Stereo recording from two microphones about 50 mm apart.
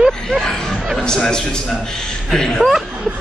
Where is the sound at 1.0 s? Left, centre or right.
Centre.